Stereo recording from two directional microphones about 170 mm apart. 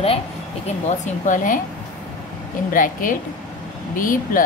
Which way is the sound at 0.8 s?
45° left (ahead or behind).